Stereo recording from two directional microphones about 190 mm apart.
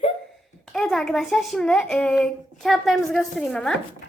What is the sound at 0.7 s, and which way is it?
A child's voice, centre (ahead or behind).